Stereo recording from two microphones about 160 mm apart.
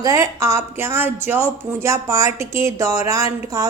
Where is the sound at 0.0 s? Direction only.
20° right (ahead or behind).